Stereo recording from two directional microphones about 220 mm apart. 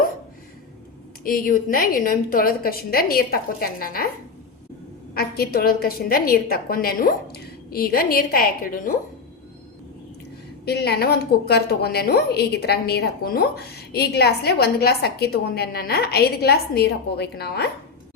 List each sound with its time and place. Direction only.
1.2 s a woman's voice: 40° left (ahead or behind)
5.1 s a woman's voice: 45° left (ahead or behind)
10.7 s a woman's voice: 45° left (ahead or behind)